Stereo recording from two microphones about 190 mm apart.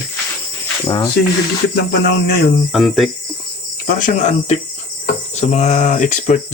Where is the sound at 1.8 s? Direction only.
60° left (ahead or behind).